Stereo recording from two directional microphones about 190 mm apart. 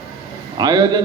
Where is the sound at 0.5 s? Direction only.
20° right (ahead or behind).